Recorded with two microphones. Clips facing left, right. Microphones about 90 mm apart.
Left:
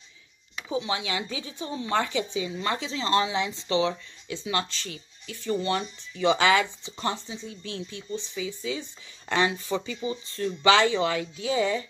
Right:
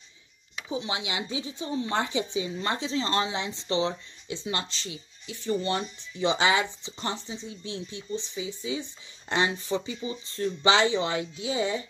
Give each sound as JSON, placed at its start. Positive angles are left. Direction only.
{"t": 0.7, "sound": "speech", "side_deg": -25}